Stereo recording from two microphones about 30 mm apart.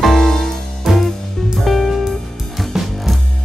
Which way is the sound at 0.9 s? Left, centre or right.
Centre.